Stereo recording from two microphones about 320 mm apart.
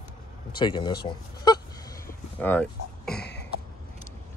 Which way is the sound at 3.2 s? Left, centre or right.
Left.